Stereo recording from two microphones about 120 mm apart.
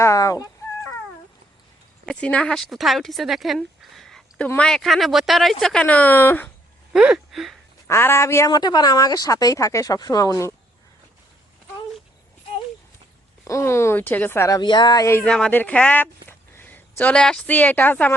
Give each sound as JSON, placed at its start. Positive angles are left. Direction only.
{"t": 0.0, "sound": "speech", "side_deg": 25}
{"t": 2.0, "sound": "speech", "side_deg": 10}
{"t": 6.9, "sound": "speech", "side_deg": -5}
{"t": 7.9, "sound": "speech", "side_deg": 20}
{"t": 8.4, "sound": "speech", "side_deg": 35}
{"t": 13.4, "sound": "speech", "side_deg": 25}
{"t": 14.5, "sound": "speech", "side_deg": 40}
{"t": 15.1, "sound": "a woman's voice", "side_deg": 5}